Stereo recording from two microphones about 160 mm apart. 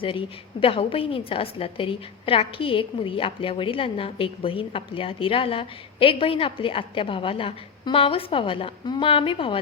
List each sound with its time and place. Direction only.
0.6 s a woman's voice: 35° left (ahead or behind)